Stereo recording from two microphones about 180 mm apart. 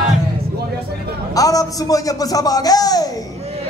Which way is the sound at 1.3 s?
20° left (ahead or behind).